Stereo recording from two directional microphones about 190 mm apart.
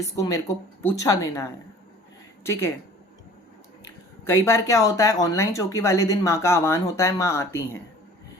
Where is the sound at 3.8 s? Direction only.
15° left (ahead or behind).